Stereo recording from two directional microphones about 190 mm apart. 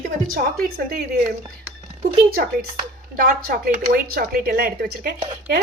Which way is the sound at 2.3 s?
50° right (ahead or behind).